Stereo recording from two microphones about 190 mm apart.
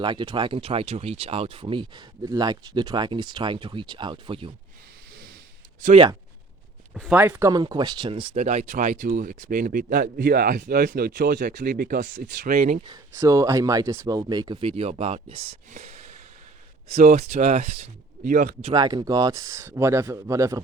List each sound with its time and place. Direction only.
0.0 s speech: 25° right (ahead or behind)
5.8 s speech: 35° right (ahead or behind)
7.1 s speech: 10° right (ahead or behind); by 12.8 s 45° right (ahead or behind)
12.8 s speech: 20° right (ahead or behind)
18.2 s speech: 50° right (ahead or behind)
18.6 s speech: 20° right (ahead or behind)